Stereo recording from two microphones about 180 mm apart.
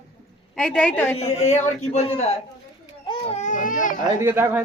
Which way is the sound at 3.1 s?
35° left (ahead or behind).